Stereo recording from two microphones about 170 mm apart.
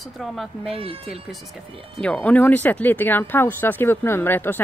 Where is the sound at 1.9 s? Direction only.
5° left (ahead or behind).